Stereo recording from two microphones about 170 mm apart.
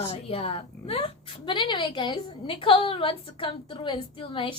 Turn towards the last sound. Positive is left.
turn(degrees=30)  # may be behind; listen again after turning